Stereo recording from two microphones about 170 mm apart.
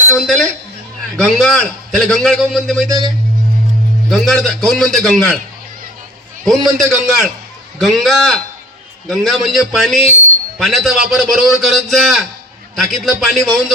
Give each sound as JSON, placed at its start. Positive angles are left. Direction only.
{"t": 0.2, "sound": "a man's voice", "side_deg": 5}
{"t": 4.1, "sound": "a man's voice", "side_deg": 0}
{"t": 6.4, "sound": "a man's voice", "side_deg": 0}